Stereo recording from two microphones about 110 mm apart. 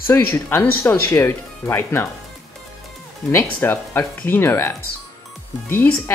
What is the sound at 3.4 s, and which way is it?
Speech, 15° left (ahead or behind).